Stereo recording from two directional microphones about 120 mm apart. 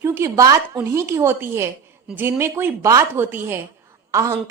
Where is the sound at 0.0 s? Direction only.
20° right (ahead or behind).